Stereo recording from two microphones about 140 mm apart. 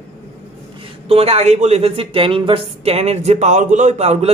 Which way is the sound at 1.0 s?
45° right (ahead or behind).